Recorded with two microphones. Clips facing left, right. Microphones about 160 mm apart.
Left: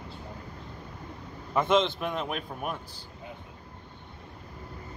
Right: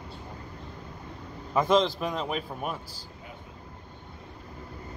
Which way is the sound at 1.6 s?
35° right (ahead or behind).